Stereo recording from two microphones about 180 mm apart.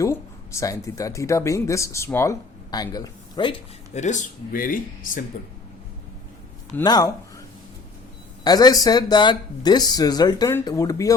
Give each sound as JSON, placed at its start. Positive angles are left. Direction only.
{"t": 0.0, "sound": "speech", "side_deg": 15}
{"t": 3.9, "sound": "speech", "side_deg": 40}
{"t": 6.8, "sound": "speech", "side_deg": 20}
{"t": 8.4, "sound": "speech", "side_deg": 20}